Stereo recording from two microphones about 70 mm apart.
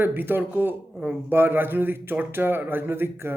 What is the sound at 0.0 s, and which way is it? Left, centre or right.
A man's voice, right.